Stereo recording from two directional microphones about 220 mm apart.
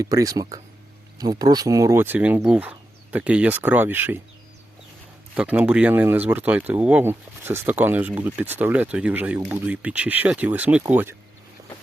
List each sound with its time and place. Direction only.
0.0 s speech: 15° right (ahead or behind)
5.3 s speech: 5° right (ahead or behind)